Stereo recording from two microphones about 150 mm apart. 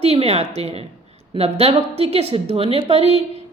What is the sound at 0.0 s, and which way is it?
A woman's voice, 40° right (ahead or behind).